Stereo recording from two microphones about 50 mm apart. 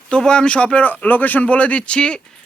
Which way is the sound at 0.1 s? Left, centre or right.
Centre.